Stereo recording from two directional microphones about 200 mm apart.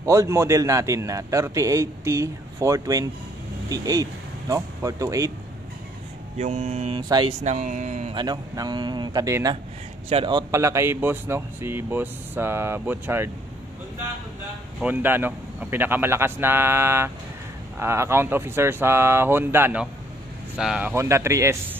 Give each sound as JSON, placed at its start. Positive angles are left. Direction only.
{"t": 0.0, "sound": "speech", "side_deg": -15}
{"t": 6.3, "sound": "speech", "side_deg": -35}
{"t": 7.0, "sound": "speech", "side_deg": -20}
{"t": 7.4, "sound": "speech", "side_deg": -40}
{"t": 8.1, "sound": "speech", "side_deg": -20}
{"t": 14.8, "sound": "speech", "side_deg": -10}